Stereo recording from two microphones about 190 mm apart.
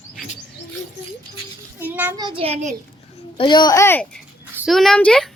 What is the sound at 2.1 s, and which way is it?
Speech, 25° right (ahead or behind).